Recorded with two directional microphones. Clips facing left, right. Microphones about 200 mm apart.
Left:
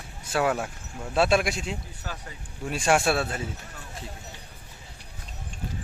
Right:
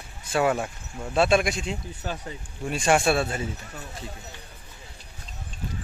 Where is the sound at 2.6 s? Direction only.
Centre (ahead or behind).